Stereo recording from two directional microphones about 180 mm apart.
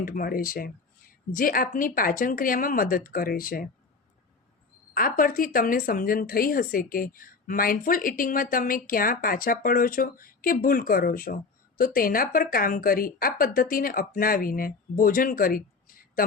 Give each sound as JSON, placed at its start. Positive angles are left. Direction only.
{"t": 0.0, "sound": "speech", "side_deg": 55}
{"t": 4.9, "sound": "speech", "side_deg": 50}